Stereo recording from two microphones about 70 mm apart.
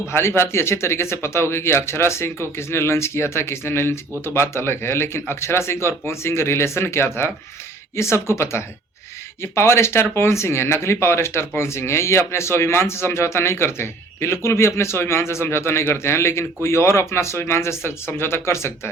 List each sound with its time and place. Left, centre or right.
0.1 s speech: left